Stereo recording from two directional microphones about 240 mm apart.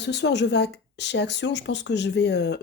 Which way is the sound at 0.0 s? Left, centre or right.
Left.